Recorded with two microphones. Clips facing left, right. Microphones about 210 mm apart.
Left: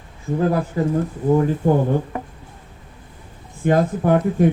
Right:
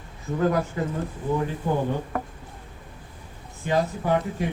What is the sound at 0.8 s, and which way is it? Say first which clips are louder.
Speech: left 8 dB; 35° left (ahead or behind).